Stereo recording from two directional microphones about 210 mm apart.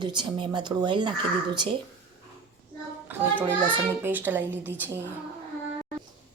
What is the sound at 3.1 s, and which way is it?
Speech, 5° right (ahead or behind).